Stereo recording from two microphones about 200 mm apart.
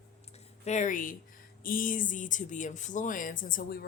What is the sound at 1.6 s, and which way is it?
Speech, 45° left (ahead or behind).